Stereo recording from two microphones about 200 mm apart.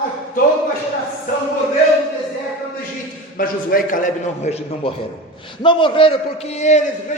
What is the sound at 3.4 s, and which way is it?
A man's voice, 45° left (ahead or behind).